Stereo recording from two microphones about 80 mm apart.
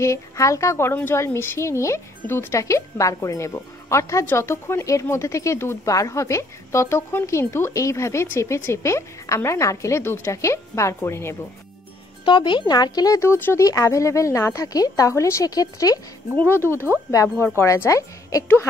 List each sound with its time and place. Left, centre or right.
0.0 s a woman's voice: left
12.3 s speech: left
13.2 s a woman's voice: left
15.4 s speech: left
16.3 s speech: left
17.1 s a woman's voice: left